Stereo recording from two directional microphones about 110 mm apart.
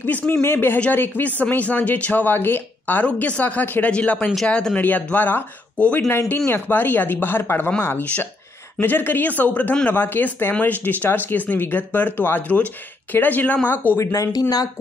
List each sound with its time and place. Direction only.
0.0 s speech: 20° left (ahead or behind); by 14.7 s 35° left (ahead or behind)